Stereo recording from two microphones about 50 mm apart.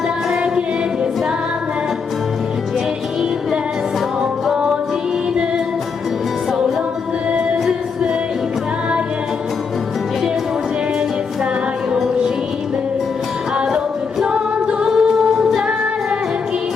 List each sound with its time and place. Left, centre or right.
14.3 s a capella: right